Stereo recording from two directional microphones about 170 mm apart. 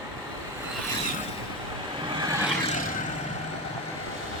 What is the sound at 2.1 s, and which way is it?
Vehicle, 25° right (ahead or behind).